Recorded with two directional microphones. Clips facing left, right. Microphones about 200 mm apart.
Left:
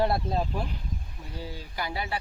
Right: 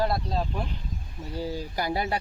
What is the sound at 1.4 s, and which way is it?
Speech, 40° right (ahead or behind).